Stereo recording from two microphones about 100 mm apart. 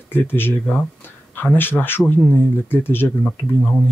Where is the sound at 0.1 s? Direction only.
20° left (ahead or behind).